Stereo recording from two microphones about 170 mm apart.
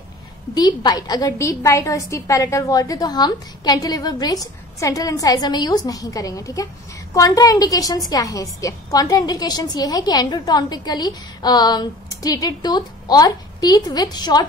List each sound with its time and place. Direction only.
0.6 s a woman's voice: 25° left (ahead or behind)